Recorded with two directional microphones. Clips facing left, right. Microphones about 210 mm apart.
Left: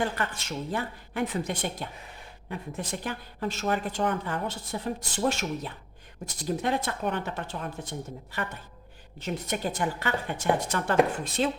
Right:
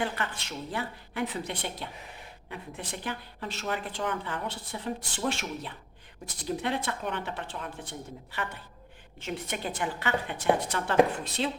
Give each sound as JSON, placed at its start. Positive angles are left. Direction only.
{"t": 0.0, "sound": "a woman's voice", "side_deg": 45}